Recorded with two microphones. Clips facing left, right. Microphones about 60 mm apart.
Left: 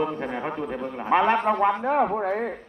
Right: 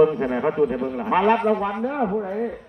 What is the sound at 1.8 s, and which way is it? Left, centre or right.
Speech, left.